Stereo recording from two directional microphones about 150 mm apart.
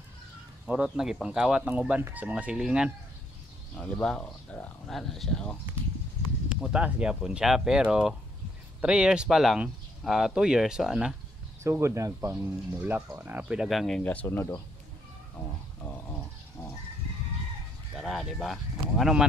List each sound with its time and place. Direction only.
0.7 s speech: 5° right (ahead or behind)
3.7 s speech: 10° left (ahead or behind)
6.6 s speech: 5° right (ahead or behind)
11.6 s speech: 20° right (ahead or behind); by 14.6 s 15° left (ahead or behind)
15.8 s a sound: 15° left (ahead or behind)
17.9 s speech: centre (ahead or behind)